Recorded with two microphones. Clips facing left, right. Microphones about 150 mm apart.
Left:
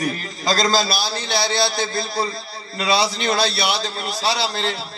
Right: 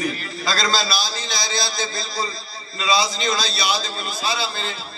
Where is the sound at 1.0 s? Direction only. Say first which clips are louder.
Left 5 dB; 60° left (ahead or behind).